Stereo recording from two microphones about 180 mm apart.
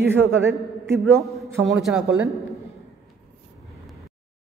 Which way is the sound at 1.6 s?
Centre (ahead or behind).